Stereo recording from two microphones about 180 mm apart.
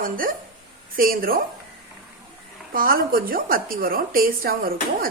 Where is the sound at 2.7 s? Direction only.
55° right (ahead or behind).